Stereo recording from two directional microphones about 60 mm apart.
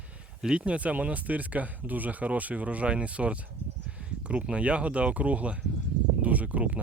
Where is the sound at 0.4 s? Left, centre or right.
Centre.